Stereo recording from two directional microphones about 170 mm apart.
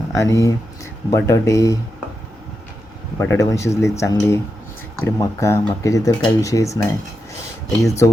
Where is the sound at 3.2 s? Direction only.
15° left (ahead or behind).